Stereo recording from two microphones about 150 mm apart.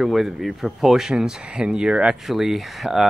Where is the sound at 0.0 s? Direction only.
Centre (ahead or behind).